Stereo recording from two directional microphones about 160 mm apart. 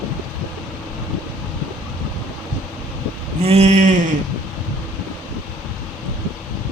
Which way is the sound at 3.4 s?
40° right (ahead or behind).